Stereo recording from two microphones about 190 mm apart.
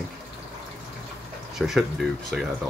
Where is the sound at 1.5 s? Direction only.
Centre (ahead or behind).